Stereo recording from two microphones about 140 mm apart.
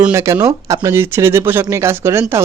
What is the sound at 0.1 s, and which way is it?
A man's voice, 20° right (ahead or behind).